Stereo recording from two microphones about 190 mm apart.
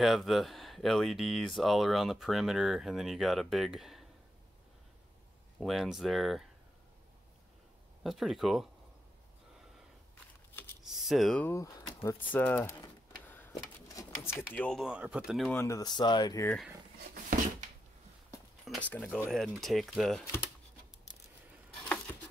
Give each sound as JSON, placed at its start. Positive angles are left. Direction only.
{"t": 0.0, "sound": "speech", "side_deg": 0}
{"t": 5.6, "sound": "speech", "side_deg": 0}
{"t": 8.0, "sound": "speech", "side_deg": 0}
{"t": 10.8, "sound": "speech", "side_deg": 0}
{"t": 13.3, "sound": "a sound", "side_deg": 15}
{"t": 14.5, "sound": "speech", "side_deg": 5}
{"t": 15.5, "sound": "speech", "side_deg": 15}
{"t": 17.1, "sound": "a sound", "side_deg": -50}
{"t": 18.9, "sound": "speech", "side_deg": 10}